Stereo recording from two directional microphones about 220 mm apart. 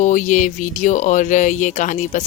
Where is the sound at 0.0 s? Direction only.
35° left (ahead or behind).